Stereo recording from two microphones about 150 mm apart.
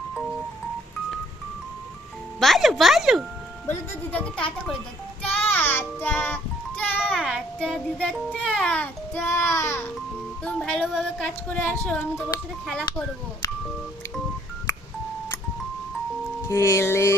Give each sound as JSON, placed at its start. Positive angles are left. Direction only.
{"t": 2.4, "sound": "speech", "side_deg": 0}
{"t": 3.7, "sound": "a child's voice", "side_deg": 10}
{"t": 10.4, "sound": "speech", "side_deg": 5}
{"t": 16.5, "sound": "music", "side_deg": 20}